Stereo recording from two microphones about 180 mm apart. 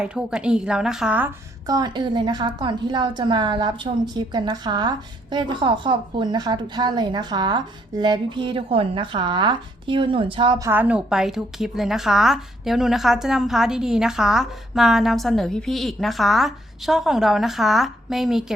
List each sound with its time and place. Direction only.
0.0 s a woman's voice: 5° right (ahead or behind)
1.6 s a woman's voice: 20° right (ahead or behind)
10.7 s a woman's voice: 10° right (ahead or behind)